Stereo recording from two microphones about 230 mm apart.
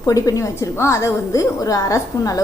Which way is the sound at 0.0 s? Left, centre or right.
Centre.